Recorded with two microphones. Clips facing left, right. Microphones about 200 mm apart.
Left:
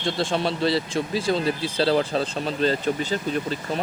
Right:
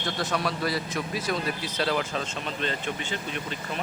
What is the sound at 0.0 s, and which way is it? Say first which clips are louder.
Speech: left 5 dB; 25° left (ahead or behind).